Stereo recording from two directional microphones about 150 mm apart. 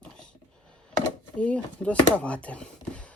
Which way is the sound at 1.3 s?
10° left (ahead or behind).